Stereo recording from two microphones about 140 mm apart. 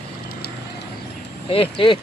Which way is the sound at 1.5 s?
40° left (ahead or behind).